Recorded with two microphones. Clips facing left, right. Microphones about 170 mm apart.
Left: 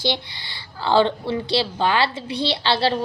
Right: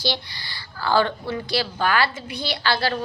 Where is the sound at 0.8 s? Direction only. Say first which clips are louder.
Left 3 dB; 25° left (ahead or behind).